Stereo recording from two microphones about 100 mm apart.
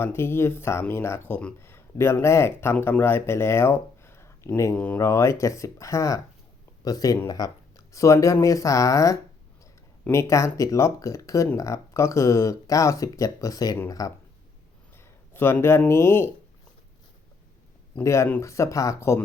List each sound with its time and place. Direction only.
0.0 s speech: 25° left (ahead or behind)
1.5 s a sound: 25° left (ahead or behind)
2.2 s speech: 25° left (ahead or behind)
14.9 s a sound: 25° left (ahead or behind)
15.9 s speech: 25° left (ahead or behind)
18.0 s speech: 30° left (ahead or behind)